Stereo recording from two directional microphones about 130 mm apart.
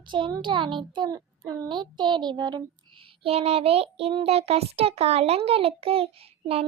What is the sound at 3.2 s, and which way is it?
A child's voice, 50° right (ahead or behind).